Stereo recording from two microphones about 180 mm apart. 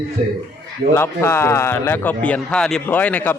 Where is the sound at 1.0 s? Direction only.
15° left (ahead or behind).